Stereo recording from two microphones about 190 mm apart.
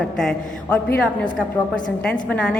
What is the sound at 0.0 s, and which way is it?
A woman's voice, centre (ahead or behind).